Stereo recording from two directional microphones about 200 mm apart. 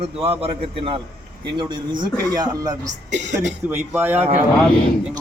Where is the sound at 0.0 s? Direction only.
30° right (ahead or behind).